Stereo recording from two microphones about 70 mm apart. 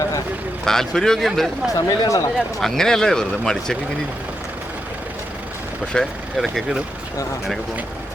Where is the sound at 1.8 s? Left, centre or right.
Left.